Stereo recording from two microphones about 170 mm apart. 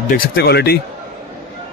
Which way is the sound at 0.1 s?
70° left (ahead or behind).